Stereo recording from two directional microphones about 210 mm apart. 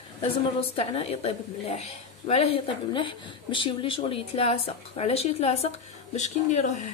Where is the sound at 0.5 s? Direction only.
30° left (ahead or behind).